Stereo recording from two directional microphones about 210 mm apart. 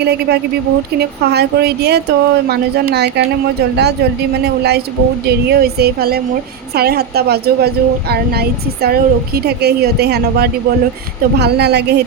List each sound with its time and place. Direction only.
0.0 s a woman's voice: 50° right (ahead or behind)
4.4 s a woman's voice: 50° right (ahead or behind)